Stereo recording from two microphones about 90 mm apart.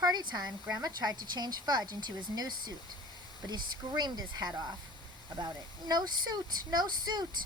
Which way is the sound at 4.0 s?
50° right (ahead or behind).